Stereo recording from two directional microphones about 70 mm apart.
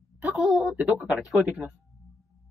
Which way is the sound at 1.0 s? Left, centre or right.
Centre.